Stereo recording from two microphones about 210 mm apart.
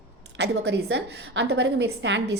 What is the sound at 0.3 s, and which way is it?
A woman's voice, 55° right (ahead or behind).